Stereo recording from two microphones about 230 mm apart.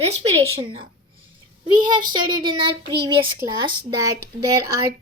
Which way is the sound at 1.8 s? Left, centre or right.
Centre.